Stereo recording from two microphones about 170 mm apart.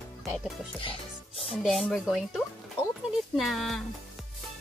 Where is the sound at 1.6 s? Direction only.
Centre (ahead or behind).